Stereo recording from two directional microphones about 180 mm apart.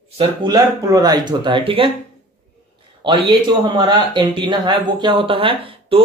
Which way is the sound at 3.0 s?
25° right (ahead or behind).